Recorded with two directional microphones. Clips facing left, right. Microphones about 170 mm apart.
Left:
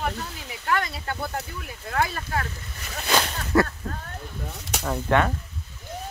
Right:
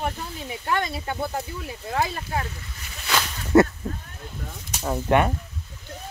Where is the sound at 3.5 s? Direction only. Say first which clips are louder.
Right 5 dB; 25° right (ahead or behind).